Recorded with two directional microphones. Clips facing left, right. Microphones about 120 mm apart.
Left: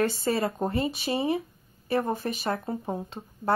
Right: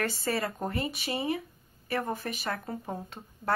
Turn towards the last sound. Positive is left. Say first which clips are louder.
# left 5 dB
turn(degrees=25)  # may be behind; listen again after turning